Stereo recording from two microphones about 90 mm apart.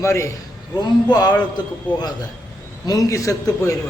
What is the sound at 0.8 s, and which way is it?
A man's voice, 50° left (ahead or behind).